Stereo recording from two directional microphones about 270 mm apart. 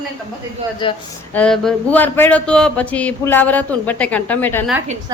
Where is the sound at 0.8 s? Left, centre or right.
Centre.